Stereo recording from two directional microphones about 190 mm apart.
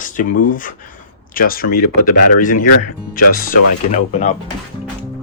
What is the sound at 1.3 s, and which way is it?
Speech, 50° left (ahead or behind).